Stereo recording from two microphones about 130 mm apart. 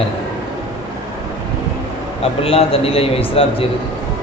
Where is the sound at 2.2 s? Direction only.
45° left (ahead or behind).